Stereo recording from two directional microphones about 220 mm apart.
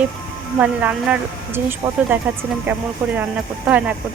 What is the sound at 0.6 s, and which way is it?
Speech, 5° right (ahead or behind).